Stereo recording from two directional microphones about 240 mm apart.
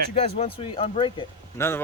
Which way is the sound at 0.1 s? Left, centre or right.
Left.